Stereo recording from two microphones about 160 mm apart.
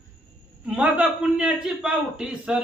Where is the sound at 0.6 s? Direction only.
10° right (ahead or behind).